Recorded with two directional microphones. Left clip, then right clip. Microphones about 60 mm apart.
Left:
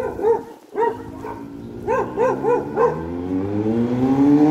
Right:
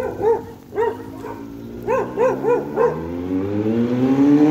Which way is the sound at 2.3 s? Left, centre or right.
Centre.